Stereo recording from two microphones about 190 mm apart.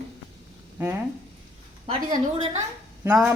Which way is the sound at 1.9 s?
20° right (ahead or behind).